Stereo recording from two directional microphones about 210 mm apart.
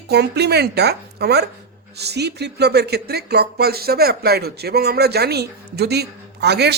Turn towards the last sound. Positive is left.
turn(degrees=-50)  # may be behind; listen again after turning